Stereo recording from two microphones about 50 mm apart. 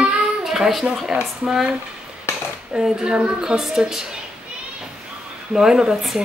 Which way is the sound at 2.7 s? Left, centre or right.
Centre.